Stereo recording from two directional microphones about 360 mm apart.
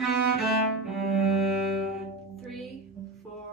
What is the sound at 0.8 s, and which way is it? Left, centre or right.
Cello, centre.